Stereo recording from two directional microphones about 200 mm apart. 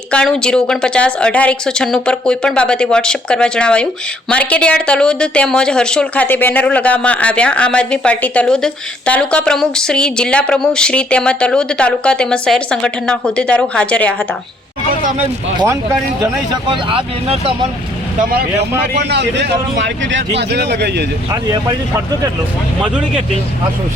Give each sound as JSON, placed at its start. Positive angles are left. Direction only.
{"t": 0.1, "sound": "speech", "side_deg": 5}
{"t": 15.5, "sound": "speech", "side_deg": -15}
{"t": 18.2, "sound": "speech", "side_deg": -45}
{"t": 18.9, "sound": "speech", "side_deg": -60}
{"t": 21.2, "sound": "speech", "side_deg": -20}